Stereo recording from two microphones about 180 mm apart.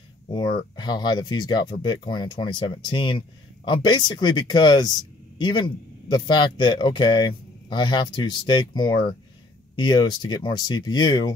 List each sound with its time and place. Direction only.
0.3 s speech: 25° left (ahead or behind)